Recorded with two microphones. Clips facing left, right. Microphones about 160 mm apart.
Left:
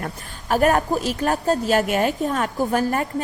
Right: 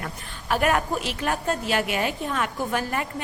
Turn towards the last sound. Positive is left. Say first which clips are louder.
# left 6 dB
turn(degrees=40)  # may be behind; listen again after turning